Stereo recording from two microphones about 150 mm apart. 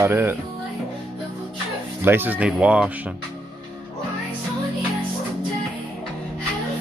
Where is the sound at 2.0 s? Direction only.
15° right (ahead or behind).